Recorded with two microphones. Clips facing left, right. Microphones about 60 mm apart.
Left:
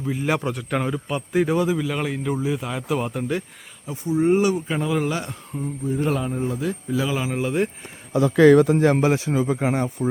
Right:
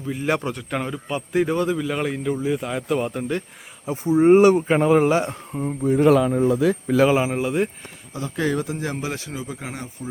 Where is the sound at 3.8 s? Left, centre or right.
Right.